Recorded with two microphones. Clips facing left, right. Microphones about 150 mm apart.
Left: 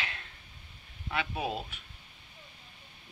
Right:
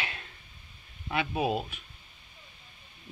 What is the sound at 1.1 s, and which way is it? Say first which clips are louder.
Speech: right 5 dB; 15° right (ahead or behind).